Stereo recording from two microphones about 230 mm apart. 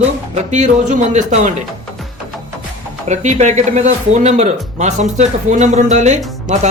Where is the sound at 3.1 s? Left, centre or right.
Right.